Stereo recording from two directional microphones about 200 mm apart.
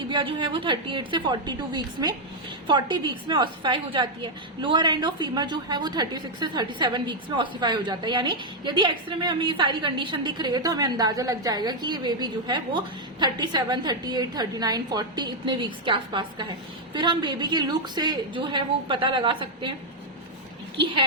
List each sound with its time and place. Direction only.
0.1 s a woman's voice: 25° right (ahead or behind)